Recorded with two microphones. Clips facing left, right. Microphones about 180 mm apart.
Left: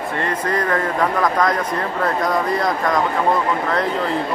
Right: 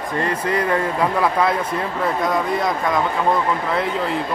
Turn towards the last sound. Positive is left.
turn(degrees=0)  # may be behind; listen again after turning